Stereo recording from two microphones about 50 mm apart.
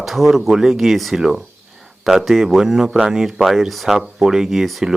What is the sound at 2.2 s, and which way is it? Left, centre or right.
Speech, centre.